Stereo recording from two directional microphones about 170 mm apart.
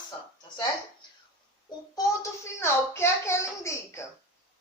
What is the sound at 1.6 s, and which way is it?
Child singing, 20° left (ahead or behind).